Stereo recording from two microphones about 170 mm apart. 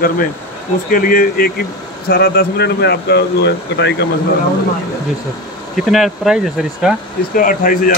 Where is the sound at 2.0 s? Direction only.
70° left (ahead or behind); by 4.1 s 90° left.